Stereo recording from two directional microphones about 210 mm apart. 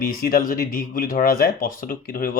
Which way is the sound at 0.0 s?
45° left (ahead or behind).